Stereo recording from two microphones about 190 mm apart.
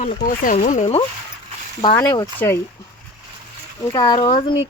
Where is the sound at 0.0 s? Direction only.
45° left (ahead or behind).